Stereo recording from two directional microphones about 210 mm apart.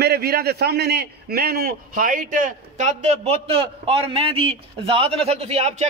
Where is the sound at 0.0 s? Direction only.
50° right (ahead or behind).